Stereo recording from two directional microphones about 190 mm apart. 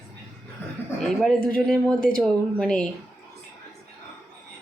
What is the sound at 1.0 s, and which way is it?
Speech, centre (ahead or behind).